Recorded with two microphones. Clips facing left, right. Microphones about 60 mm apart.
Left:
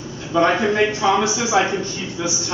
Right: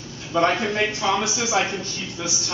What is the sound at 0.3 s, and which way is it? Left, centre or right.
A man's voice, left.